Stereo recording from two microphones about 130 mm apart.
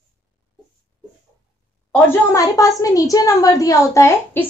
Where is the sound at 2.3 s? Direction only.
25° left (ahead or behind).